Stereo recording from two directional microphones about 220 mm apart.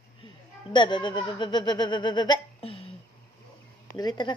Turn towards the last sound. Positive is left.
turn(degrees=20)  # may be behind; listen again after turning